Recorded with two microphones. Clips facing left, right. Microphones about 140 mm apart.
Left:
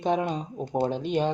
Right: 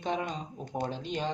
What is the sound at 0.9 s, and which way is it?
Speech, 55° left (ahead or behind).